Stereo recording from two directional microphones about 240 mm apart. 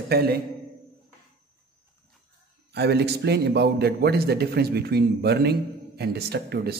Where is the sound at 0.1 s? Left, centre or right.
Right.